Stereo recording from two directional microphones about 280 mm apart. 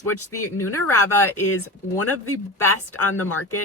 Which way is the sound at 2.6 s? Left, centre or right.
Centre.